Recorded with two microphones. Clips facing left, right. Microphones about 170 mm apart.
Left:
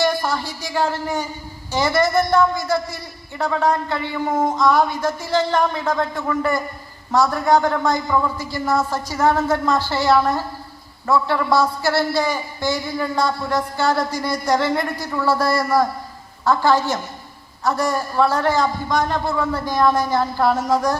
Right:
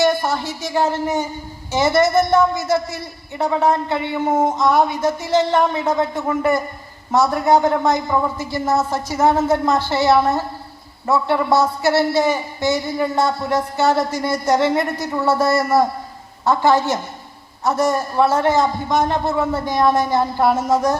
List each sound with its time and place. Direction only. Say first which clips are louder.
0.0 s a man's voice: right 3 dB; 25° right (ahead or behind)